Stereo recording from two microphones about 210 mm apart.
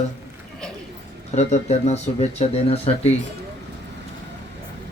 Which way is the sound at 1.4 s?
30° left (ahead or behind).